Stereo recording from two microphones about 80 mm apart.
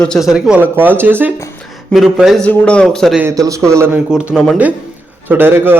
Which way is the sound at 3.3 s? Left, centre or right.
Right.